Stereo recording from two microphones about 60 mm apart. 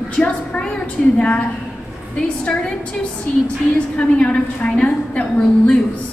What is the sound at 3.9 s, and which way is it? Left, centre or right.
A woman's voice, centre.